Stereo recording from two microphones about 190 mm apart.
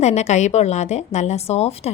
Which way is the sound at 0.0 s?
35° left (ahead or behind).